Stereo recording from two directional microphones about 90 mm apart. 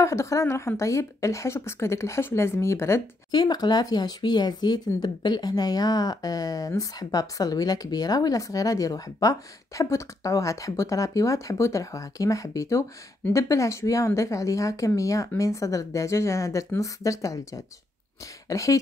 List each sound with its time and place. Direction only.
0.0 s speech: 35° left (ahead or behind)
3.3 s speech: 50° left (ahead or behind)